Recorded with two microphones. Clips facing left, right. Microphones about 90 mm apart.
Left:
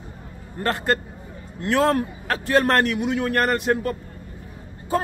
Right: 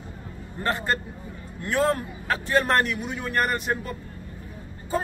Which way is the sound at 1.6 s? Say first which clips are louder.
Left 4 dB; 90° left.